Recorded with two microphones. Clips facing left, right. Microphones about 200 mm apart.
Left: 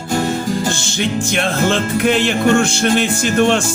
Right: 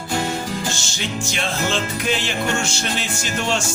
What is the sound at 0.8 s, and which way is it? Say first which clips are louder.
Music: left 8 dB; 55° left (ahead or behind).